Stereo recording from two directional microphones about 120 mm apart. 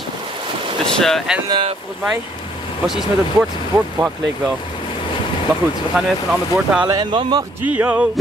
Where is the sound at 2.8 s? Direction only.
5° right (ahead or behind).